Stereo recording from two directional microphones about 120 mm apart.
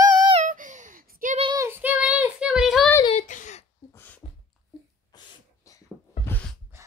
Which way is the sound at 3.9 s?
15° left (ahead or behind).